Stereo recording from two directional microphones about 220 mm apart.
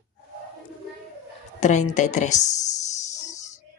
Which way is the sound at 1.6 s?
35° left (ahead or behind).